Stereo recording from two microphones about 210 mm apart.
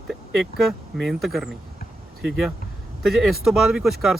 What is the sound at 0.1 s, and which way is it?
Speech, centre (ahead or behind).